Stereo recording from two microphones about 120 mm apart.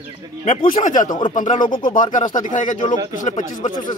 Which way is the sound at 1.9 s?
90° left.